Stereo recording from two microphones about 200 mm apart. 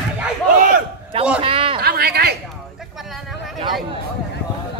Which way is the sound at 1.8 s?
50° right (ahead or behind).